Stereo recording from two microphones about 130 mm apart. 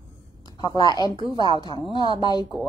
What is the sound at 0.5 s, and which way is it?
Speech, 35° left (ahead or behind).